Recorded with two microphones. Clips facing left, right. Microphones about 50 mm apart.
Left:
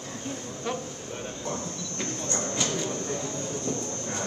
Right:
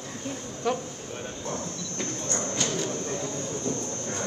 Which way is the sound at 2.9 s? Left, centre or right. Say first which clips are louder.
Even; right.